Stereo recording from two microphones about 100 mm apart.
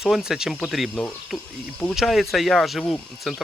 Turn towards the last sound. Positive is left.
turn(degrees=0)  # may be behind; listen again after turning